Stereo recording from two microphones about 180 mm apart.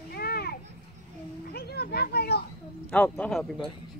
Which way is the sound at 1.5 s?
60° left (ahead or behind).